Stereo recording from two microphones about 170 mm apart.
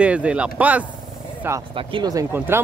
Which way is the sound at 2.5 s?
15° right (ahead or behind).